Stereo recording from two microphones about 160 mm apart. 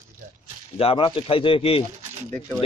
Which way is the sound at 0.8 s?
35° left (ahead or behind).